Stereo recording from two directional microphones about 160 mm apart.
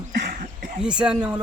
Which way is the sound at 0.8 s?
5° right (ahead or behind).